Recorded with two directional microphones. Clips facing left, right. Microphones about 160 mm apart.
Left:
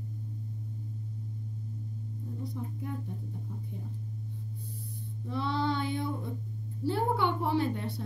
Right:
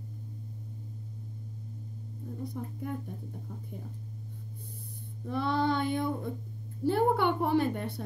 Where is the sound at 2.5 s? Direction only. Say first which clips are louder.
Right 2 dB; 55° right (ahead or behind).